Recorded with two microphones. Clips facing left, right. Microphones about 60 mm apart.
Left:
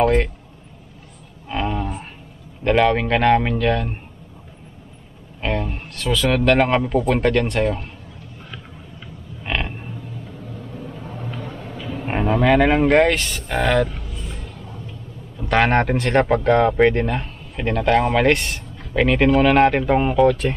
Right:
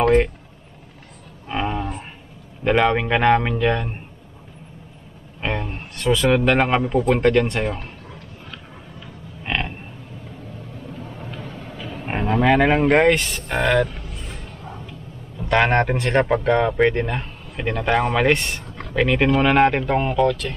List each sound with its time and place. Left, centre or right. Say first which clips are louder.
0.0 s speech: right 1 dB; centre
1.5 s a sound: even; centre
2.6 s speech: left 1 dB; centre
5.4 s speech: left 2 dB; centre
9.4 s a sound: even; centre
11.2 s vehicle: left 6 dB; centre
12.0 s speech: left 1 dB; centre
15.3 s speech: even; centre
18.6 s a sound: right 3 dB; right
18.9 s speech: left 2 dB; centre